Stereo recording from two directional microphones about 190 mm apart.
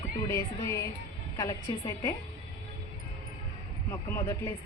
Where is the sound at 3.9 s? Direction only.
15° left (ahead or behind).